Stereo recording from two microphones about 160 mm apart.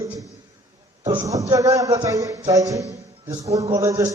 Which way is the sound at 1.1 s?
20° right (ahead or behind).